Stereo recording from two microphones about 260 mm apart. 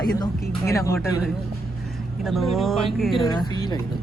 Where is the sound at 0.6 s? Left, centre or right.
Centre.